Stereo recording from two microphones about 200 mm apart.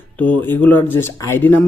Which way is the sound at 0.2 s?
10° left (ahead or behind).